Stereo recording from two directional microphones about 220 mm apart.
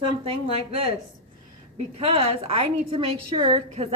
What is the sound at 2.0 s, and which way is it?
A woman's voice, 25° right (ahead or behind).